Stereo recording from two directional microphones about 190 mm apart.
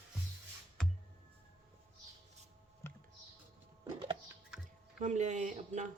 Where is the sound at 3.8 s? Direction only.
25° right (ahead or behind).